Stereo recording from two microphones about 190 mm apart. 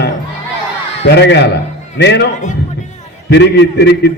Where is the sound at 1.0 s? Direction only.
65° left (ahead or behind).